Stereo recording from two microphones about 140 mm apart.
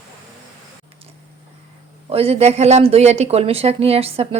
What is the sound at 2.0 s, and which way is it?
Speech, 45° right (ahead or behind).